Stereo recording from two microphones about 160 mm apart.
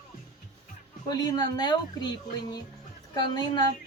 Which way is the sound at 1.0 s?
25° left (ahead or behind).